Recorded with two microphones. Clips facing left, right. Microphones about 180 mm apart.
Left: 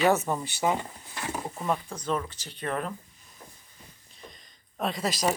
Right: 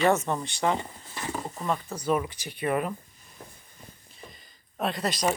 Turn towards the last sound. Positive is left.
turn(degrees=0)  # may be behind; listen again after turning